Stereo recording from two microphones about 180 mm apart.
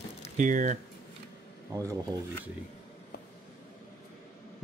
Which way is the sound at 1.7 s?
20° right (ahead or behind).